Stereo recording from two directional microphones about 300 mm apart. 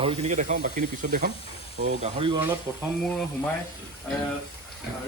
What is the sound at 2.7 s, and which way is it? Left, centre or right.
Speech, centre.